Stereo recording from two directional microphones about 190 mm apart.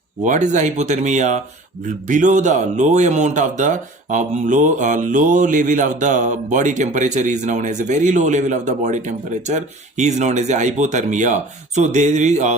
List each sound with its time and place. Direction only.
0.3 s speech: 40° right (ahead or behind)